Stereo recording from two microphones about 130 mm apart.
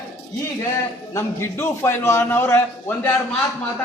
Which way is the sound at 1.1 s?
20° left (ahead or behind).